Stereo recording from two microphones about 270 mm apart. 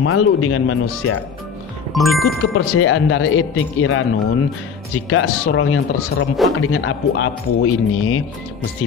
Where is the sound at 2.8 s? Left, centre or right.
Left.